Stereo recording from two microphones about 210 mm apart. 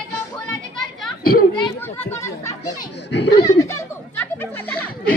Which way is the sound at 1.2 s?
45° left (ahead or behind).